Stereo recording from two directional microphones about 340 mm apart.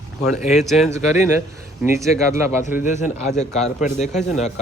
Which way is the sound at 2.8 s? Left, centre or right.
Left.